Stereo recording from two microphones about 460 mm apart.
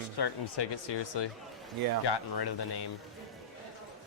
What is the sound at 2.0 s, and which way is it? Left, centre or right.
Speech, left.